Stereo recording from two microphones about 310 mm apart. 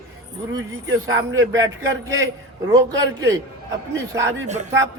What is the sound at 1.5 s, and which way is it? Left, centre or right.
Speech, centre.